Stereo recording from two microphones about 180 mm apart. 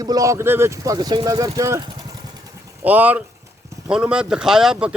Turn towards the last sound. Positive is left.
turn(degrees=-5)  # may be behind; listen again after turning